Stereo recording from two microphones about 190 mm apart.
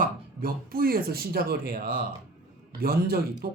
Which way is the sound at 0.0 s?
50° right (ahead or behind).